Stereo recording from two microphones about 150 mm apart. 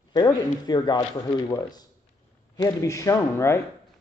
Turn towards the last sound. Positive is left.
turn(degrees=20)  # may be behind; listen again after turning